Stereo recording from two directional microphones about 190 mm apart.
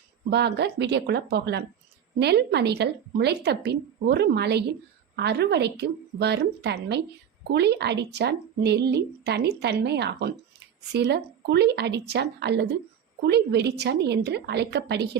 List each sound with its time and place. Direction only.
0.3 s a woman's voice: 60° right (ahead or behind)